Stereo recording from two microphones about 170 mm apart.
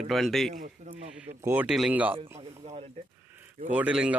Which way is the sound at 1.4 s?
10° right (ahead or behind).